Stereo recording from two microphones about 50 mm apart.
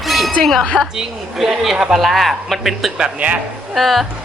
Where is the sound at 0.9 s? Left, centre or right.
Centre.